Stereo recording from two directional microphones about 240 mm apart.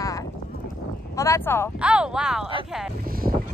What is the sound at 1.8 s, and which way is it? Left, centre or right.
Speech, centre.